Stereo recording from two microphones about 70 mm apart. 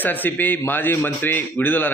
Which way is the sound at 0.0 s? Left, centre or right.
Left.